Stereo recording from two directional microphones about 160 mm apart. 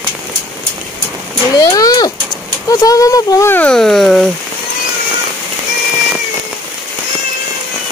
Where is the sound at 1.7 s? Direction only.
25° left (ahead or behind).